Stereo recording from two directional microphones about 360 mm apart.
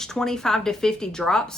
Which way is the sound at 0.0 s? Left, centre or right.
Centre.